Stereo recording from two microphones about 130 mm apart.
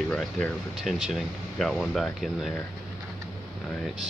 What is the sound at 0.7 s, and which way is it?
Speech, 5° right (ahead or behind).